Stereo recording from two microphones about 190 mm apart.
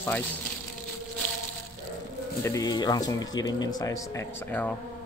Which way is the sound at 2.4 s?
20° left (ahead or behind).